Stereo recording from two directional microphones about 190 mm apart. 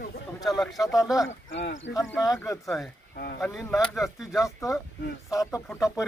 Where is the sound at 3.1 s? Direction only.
60° left (ahead or behind).